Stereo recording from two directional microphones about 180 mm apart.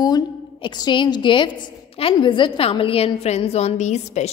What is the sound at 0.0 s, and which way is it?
A woman's voice, 25° left (ahead or behind).